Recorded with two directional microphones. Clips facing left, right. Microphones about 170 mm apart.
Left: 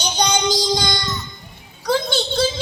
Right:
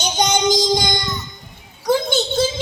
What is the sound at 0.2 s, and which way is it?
Child singing, 20° right (ahead or behind).